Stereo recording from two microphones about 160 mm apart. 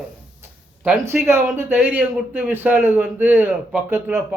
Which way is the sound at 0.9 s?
15° right (ahead or behind).